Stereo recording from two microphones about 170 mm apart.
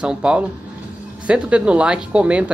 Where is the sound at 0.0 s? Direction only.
5° right (ahead or behind).